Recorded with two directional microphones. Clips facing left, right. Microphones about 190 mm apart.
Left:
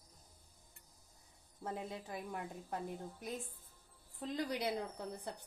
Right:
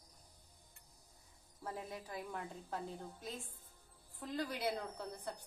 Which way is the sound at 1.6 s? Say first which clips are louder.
Left 2 dB; 25° left (ahead or behind).